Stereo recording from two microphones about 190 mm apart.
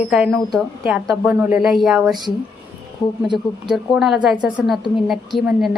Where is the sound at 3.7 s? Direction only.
Centre (ahead or behind).